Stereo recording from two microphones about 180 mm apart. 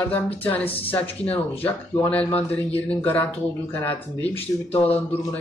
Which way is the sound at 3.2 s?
10° left (ahead or behind).